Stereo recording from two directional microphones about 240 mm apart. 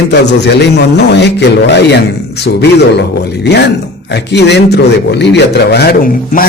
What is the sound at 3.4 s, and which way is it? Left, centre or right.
A man's voice, left.